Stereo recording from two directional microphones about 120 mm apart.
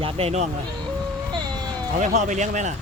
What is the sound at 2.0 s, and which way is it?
Speech, 90° right.